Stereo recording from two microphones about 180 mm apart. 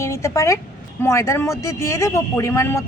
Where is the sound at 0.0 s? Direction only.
15° left (ahead or behind).